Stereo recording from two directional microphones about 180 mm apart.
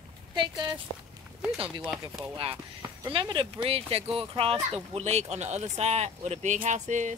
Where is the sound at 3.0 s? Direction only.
25° right (ahead or behind).